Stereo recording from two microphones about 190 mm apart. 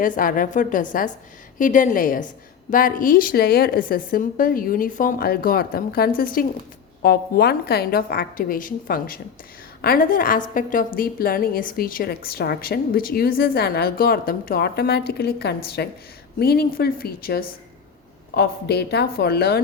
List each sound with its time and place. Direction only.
0.0 s a woman's voice: 45° left (ahead or behind)